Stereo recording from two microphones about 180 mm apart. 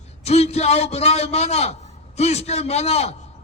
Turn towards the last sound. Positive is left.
turn(degrees=35)  # may be behind; listen again after turning